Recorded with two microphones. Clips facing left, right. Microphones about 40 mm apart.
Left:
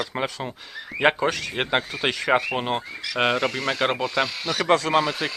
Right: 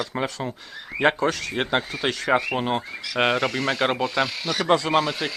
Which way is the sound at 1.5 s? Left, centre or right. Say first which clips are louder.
Even; left.